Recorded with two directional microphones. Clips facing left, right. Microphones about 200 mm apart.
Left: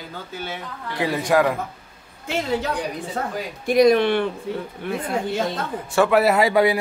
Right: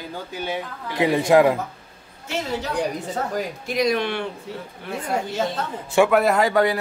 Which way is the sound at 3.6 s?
55° left (ahead or behind).